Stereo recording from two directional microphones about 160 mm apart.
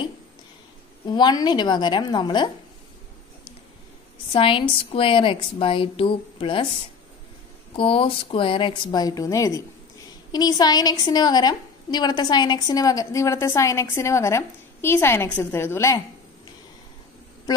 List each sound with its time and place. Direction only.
1.0 s a woman's voice: 25° left (ahead or behind)
4.3 s a woman's voice: 35° left (ahead or behind)
7.7 s a woman's voice: 35° left (ahead or behind); by 16.0 s 15° left (ahead or behind)